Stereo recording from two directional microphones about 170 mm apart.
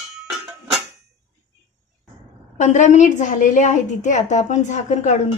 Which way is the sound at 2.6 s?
45° left (ahead or behind).